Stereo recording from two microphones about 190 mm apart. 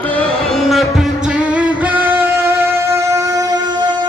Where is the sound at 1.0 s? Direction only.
5° right (ahead or behind).